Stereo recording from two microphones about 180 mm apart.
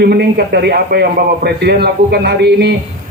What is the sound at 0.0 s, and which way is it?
A man's voice, 65° right (ahead or behind).